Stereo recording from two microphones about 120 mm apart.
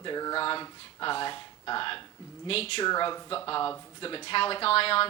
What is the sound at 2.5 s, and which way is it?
Speech, 55° left (ahead or behind).